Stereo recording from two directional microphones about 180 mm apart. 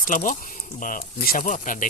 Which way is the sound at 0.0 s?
45° left (ahead or behind).